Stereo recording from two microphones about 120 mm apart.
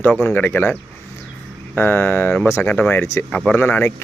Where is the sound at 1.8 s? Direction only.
20° left (ahead or behind).